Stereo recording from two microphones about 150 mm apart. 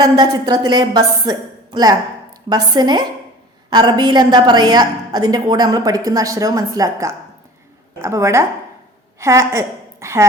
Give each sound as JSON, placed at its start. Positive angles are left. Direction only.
{"t": 0.0, "sound": "a woman's voice", "side_deg": -25}